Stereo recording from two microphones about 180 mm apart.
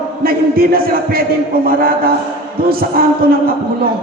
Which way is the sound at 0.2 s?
55° right (ahead or behind).